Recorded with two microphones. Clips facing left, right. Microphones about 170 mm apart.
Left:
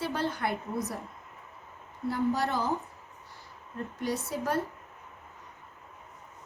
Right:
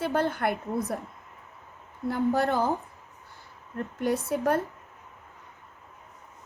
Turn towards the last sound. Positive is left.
turn(degrees=-55)  # may be behind; listen again after turning